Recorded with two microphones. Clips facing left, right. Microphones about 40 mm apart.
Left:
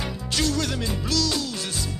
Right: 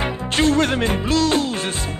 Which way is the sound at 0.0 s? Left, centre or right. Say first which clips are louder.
Right 7 dB; right.